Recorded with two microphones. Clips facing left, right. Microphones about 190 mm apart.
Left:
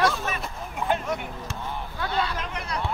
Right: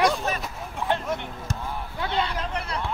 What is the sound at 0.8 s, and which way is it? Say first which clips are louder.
Speech: even; centre (ahead or behind).